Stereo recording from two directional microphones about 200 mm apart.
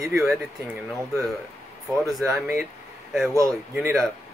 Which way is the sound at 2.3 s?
10° right (ahead or behind).